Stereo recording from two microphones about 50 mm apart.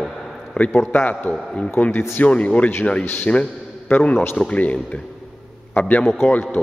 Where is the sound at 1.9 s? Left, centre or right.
Left.